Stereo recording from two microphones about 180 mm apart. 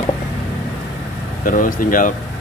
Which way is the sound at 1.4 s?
50° left (ahead or behind).